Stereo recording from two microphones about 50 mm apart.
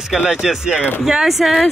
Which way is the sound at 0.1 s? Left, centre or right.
Centre.